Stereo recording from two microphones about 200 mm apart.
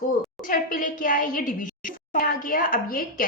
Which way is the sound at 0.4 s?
40° left (ahead or behind).